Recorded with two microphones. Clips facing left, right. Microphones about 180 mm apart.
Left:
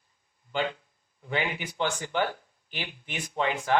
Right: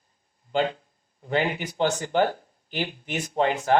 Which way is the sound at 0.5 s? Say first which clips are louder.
Right 5 dB; 40° right (ahead or behind).